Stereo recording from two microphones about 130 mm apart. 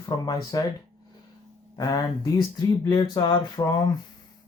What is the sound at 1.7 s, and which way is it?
Speech, 25° left (ahead or behind).